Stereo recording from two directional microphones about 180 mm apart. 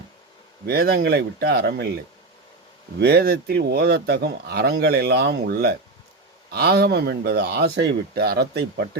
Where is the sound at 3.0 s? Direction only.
60° right (ahead or behind).